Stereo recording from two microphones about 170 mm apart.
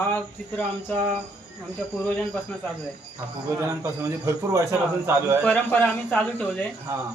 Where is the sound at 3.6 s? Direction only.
15° right (ahead or behind).